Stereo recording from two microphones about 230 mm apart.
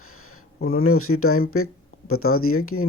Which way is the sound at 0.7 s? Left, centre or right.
Left.